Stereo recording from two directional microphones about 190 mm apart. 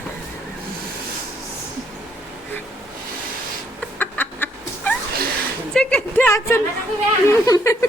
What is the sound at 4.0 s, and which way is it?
Chicken, 10° left (ahead or behind).